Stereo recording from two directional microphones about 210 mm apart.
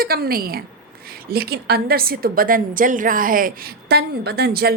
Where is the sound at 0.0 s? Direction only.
45° right (ahead or behind).